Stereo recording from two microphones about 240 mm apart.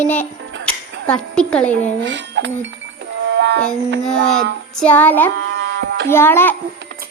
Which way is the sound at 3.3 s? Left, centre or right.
Right.